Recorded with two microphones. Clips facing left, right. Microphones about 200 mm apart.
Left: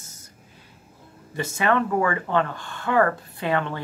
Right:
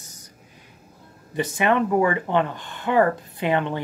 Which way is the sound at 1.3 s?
20° right (ahead or behind).